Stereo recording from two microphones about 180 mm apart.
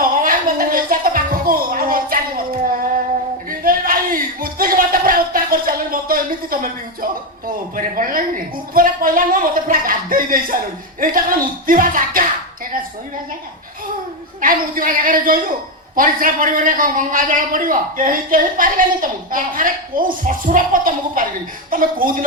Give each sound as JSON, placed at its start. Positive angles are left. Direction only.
{"t": 0.0, "sound": "music", "side_deg": -50}
{"t": 3.6, "sound": "a sound", "side_deg": -50}
{"t": 7.9, "sound": "a man's voice", "side_deg": -50}
{"t": 14.4, "sound": "a man's voice", "side_deg": -50}